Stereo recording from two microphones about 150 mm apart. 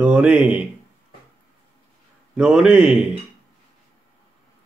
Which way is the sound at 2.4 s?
5° right (ahead or behind).